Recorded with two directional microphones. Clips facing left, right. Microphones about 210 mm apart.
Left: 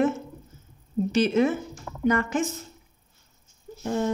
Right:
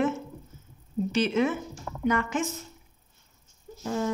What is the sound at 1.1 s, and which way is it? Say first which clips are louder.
Speech: left 3 dB; 40° left (ahead or behind).